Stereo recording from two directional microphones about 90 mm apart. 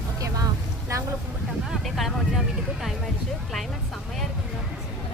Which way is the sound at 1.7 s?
Centre (ahead or behind).